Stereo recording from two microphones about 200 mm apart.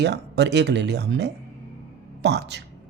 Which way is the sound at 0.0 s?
60° right (ahead or behind).